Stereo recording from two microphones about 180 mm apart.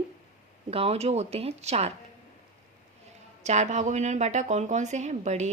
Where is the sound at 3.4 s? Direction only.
40° right (ahead or behind).